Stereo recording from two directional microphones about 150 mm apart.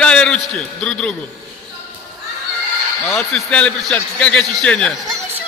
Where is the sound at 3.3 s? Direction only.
10° left (ahead or behind).